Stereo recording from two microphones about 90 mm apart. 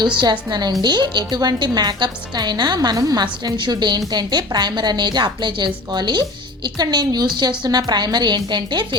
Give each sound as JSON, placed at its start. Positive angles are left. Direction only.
{"t": 0.2, "sound": "a woman's voice", "side_deg": -50}